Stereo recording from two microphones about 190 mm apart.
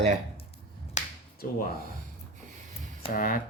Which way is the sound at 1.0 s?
40° left (ahead or behind).